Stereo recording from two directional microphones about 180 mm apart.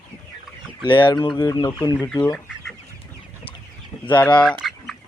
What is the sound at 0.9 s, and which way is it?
Speech, 25° left (ahead or behind).